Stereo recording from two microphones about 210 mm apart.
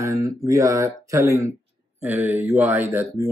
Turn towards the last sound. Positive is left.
turn(degrees=-10)  # may be behind; listen again after turning